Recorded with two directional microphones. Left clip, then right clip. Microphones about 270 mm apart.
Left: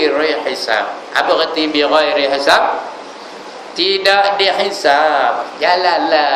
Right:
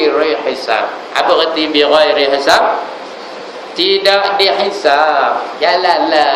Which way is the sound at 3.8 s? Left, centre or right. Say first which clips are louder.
Right 1 dB; centre.